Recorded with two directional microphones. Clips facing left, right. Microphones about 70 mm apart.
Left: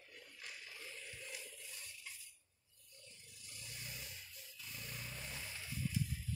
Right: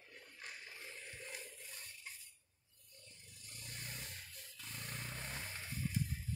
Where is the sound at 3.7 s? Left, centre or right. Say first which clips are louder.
Right 2 dB; right.